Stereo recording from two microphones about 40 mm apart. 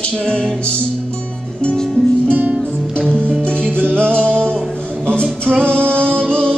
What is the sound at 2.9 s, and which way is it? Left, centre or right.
Music, left.